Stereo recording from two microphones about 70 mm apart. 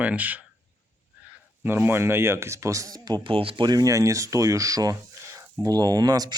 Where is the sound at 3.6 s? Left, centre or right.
Right.